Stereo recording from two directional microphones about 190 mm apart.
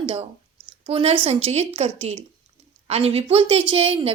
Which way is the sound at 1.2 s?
35° right (ahead or behind).